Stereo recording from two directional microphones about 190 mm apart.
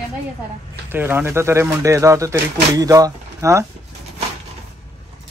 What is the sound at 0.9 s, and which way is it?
Speech, 10° right (ahead or behind).